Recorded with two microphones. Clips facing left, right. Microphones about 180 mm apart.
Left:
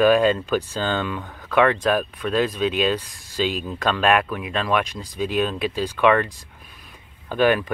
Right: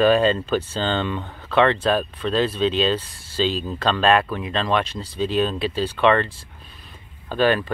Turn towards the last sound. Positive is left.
turn(degrees=15)  # may be behind; listen again after turning